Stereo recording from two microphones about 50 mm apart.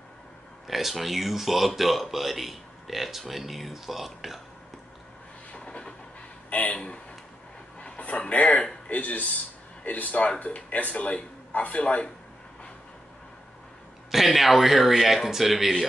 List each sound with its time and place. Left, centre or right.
0.7 s speech: centre
5.5 s a sound: left
6.5 s a man's voice: left
7.8 s a sound: left
8.8 s a man's voice: left
14.1 s speech: centre